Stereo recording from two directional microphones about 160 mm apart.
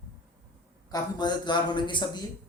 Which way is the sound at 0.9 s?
25° left (ahead or behind).